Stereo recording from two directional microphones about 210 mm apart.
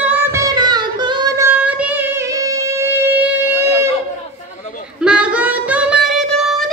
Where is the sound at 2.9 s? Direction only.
10° right (ahead or behind).